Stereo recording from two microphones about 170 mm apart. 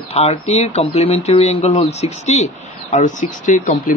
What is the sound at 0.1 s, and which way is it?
A man's voice, 40° left (ahead or behind).